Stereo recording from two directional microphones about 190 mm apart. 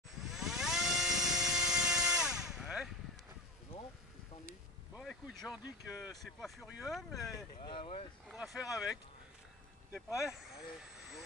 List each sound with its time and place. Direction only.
0.1 s helicopter: centre (ahead or behind)
4.9 s boat: centre (ahead or behind)
5.9 s speech: centre (ahead or behind)
7.6 s speech: 30° left (ahead or behind)
8.3 s speech: 5° right (ahead or behind)
10.3 s speech: centre (ahead or behind)